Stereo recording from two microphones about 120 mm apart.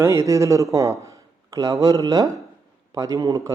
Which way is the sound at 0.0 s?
25° right (ahead or behind).